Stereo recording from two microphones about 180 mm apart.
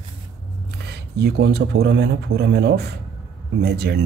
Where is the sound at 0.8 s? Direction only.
70° right (ahead or behind).